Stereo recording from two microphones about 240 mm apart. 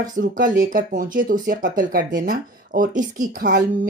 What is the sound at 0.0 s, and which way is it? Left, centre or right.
Speech, right.